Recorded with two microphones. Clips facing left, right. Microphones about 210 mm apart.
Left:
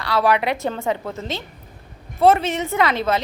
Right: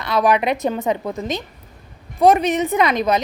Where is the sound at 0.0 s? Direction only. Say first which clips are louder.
Right 2 dB; 20° right (ahead or behind).